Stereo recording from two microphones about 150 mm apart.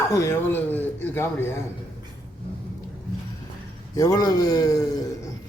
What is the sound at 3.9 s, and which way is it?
Speech, 25° left (ahead or behind).